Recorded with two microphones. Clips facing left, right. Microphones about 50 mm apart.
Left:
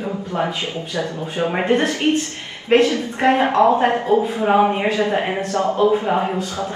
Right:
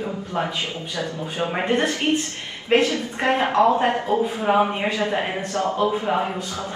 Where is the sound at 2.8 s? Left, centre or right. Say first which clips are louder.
Left 5 dB; left.